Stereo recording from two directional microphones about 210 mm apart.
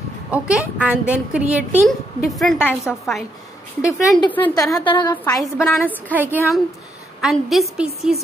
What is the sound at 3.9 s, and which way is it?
A woman's voice, 20° left (ahead or behind).